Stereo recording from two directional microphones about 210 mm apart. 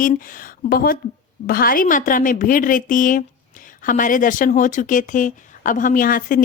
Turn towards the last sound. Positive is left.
turn(degrees=40)  # may be behind; listen again after turning